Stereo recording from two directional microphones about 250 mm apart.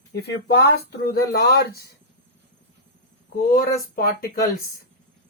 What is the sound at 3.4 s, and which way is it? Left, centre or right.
Speech, left.